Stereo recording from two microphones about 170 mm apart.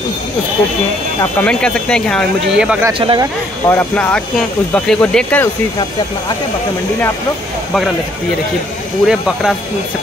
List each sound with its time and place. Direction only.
1.4 s speech: 5° left (ahead or behind)
3.0 s speech: 30° right (ahead or behind)
3.6 s speech: 10° left (ahead or behind)
9.0 s speech: centre (ahead or behind)